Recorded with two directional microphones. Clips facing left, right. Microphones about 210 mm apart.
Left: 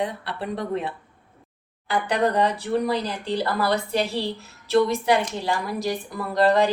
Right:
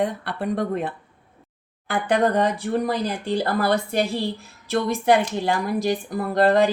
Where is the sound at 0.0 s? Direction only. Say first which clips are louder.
Right 4 dB; 50° right (ahead or behind).